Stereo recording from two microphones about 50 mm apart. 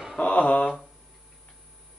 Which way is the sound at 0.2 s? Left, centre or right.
Left.